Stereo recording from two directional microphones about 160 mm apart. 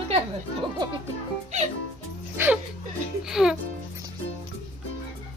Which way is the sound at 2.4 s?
15° right (ahead or behind).